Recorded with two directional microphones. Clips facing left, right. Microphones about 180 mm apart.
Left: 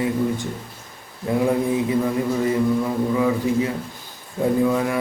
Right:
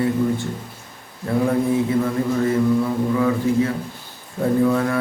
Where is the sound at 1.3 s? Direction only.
15° left (ahead or behind).